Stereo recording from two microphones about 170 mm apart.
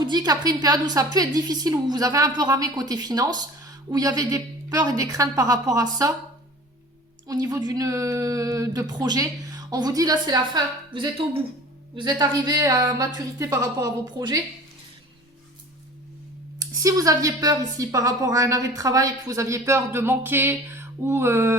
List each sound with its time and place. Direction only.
0.0 s a woman's voice: 25° right (ahead or behind)
7.3 s a woman's voice: 20° right (ahead or behind)
16.6 s a woman's voice: 20° right (ahead or behind)